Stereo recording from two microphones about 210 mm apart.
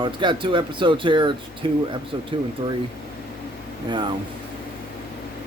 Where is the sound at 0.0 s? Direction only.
25° right (ahead or behind).